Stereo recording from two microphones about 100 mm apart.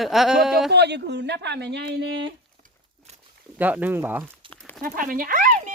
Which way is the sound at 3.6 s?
15° right (ahead or behind).